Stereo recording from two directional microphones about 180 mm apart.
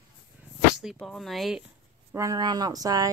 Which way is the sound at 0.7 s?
Centre (ahead or behind).